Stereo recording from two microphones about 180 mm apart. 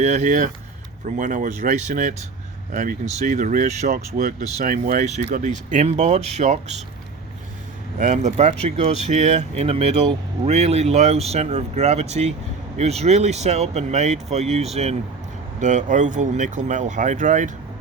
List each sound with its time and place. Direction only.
0.0 s speech: 40° right (ahead or behind)
7.9 s speech: 45° right (ahead or behind)